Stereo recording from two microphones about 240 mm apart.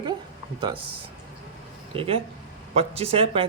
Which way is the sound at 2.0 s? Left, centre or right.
Right.